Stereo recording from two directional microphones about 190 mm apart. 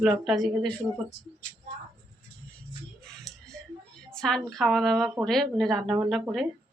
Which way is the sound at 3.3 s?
Centre (ahead or behind).